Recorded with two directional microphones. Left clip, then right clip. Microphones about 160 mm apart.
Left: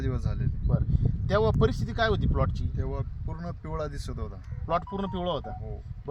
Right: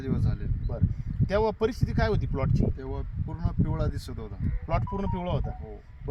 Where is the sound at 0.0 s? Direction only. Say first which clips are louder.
Right 2 dB; 25° left (ahead or behind).